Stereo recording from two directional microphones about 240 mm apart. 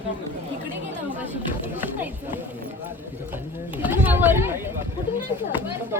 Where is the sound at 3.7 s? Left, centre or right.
Centre.